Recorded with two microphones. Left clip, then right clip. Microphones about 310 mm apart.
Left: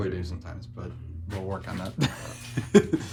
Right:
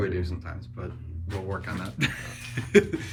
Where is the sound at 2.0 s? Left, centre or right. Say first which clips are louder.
Right 3 dB; centre.